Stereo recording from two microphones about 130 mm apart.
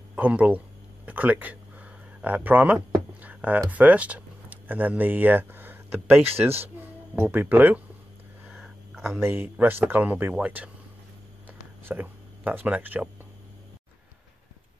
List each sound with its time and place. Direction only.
0.1 s speech: 10° right (ahead or behind)
1.0 s a sound: 10° right (ahead or behind)
3.7 s speech: 10° right (ahead or behind)
8.5 s a sound: centre (ahead or behind)
9.2 s speech: 15° right (ahead or behind)
11.8 s speech: 15° right (ahead or behind)